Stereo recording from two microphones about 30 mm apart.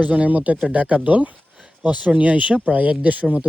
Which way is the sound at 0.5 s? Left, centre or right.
Right.